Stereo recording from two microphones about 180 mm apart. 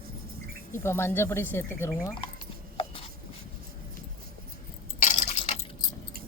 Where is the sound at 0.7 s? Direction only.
15° left (ahead or behind).